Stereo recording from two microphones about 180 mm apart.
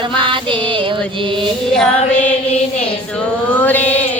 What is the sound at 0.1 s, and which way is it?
Music, 30° right (ahead or behind).